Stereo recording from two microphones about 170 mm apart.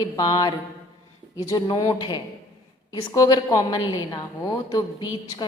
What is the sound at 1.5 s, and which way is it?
A woman's voice, 20° left (ahead or behind).